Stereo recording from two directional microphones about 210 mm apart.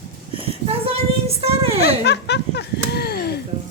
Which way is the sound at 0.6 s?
25° right (ahead or behind).